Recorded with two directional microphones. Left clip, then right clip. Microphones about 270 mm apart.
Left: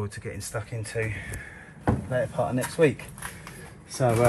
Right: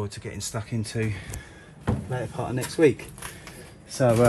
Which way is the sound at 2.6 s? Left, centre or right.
Centre.